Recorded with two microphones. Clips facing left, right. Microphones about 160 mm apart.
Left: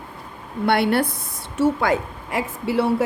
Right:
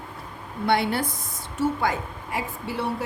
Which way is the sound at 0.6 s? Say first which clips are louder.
Left 4 dB; 65° left (ahead or behind).